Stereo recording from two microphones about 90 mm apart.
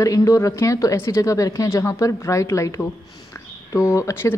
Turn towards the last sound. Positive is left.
turn(degrees=30)  # may be behind; listen again after turning